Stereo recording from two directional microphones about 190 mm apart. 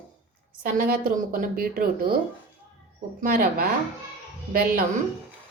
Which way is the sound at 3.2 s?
50° right (ahead or behind).